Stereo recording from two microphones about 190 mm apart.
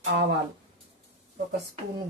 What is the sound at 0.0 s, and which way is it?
Speech, 65° right (ahead or behind).